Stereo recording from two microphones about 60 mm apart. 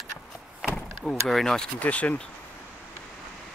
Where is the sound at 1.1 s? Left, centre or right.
Centre.